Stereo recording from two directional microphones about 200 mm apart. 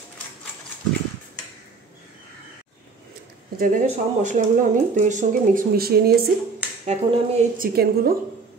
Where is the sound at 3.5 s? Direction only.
40° right (ahead or behind).